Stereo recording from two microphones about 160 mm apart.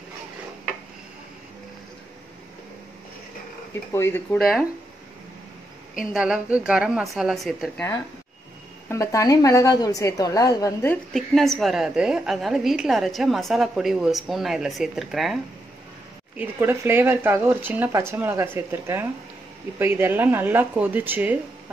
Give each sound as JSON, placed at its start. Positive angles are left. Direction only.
{"t": 3.9, "sound": "speech", "side_deg": 15}
{"t": 4.4, "sound": "a woman's voice", "side_deg": 0}
{"t": 5.9, "sound": "a woman's voice", "side_deg": -5}
{"t": 8.8, "sound": "a woman's voice", "side_deg": 20}
{"t": 11.1, "sound": "a woman's voice", "side_deg": 0}
{"t": 16.3, "sound": "speech", "side_deg": -15}